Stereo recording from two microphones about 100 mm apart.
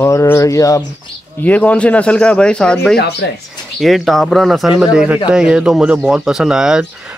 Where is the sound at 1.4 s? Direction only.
15° left (ahead or behind).